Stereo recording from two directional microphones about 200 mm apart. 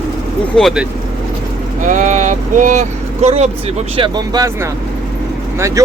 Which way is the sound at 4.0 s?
20° right (ahead or behind).